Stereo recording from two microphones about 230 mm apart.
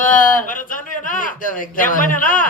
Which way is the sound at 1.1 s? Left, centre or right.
Left.